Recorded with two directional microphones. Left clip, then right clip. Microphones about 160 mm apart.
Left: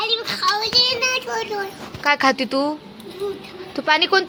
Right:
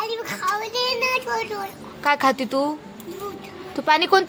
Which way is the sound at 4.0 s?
15° right (ahead or behind).